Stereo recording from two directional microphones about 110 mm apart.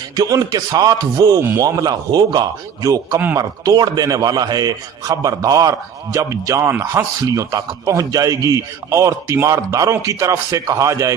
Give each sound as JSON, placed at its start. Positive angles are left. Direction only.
{"t": 0.2, "sound": "a man's voice", "side_deg": -35}
{"t": 1.4, "sound": "speech", "side_deg": -25}
{"t": 1.6, "sound": "a man's voice", "side_deg": -35}